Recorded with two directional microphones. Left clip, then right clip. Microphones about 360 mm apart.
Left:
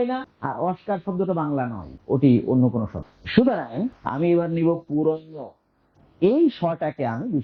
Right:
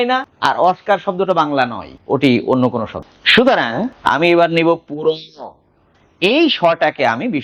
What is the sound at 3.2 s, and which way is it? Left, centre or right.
A woman's voice, centre.